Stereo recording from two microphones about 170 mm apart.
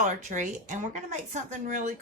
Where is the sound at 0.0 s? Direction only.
45° right (ahead or behind).